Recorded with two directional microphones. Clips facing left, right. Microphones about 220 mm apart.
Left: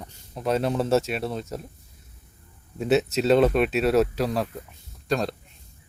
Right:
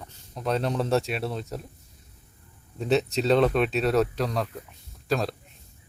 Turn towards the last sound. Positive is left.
turn(degrees=0)  # may be behind; listen again after turning